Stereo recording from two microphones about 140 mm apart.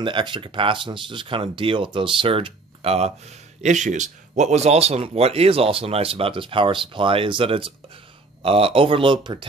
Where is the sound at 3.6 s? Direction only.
60° right (ahead or behind).